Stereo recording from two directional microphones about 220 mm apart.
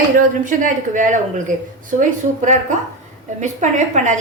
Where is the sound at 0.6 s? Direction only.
35° right (ahead or behind).